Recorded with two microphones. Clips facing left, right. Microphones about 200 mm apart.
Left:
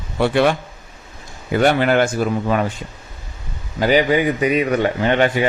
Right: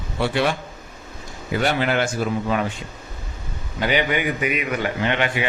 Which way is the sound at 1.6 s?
50° left (ahead or behind).